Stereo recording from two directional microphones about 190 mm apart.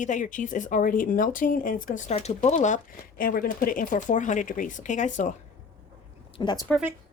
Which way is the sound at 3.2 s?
50° left (ahead or behind).